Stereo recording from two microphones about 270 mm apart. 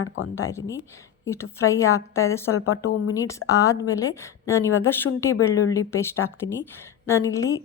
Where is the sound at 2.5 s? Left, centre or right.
Left.